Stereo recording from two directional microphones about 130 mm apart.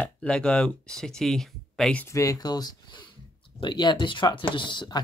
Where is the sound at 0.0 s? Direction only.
5° left (ahead or behind).